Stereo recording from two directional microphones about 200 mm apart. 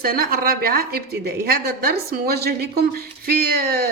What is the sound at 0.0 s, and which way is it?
A woman's voice, 45° right (ahead or behind).